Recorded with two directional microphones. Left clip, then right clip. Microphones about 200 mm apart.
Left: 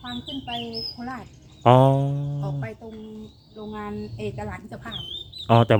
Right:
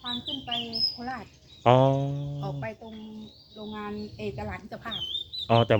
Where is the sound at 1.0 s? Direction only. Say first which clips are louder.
Left 1 dB; 15° right (ahead or behind).